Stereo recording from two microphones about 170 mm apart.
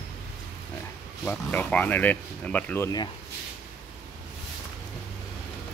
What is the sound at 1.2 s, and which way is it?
Speech, 10° left (ahead or behind).